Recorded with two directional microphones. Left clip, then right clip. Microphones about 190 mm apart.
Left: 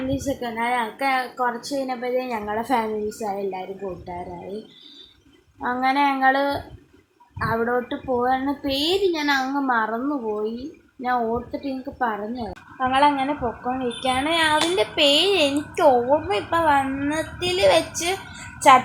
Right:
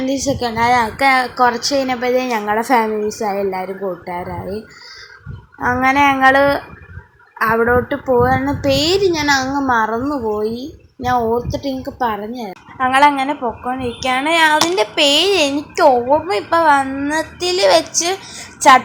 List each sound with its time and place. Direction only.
0.1 s a woman's voice: 35° right (ahead or behind); by 4.2 s 20° right (ahead or behind)
5.5 s a woman's voice: 20° right (ahead or behind)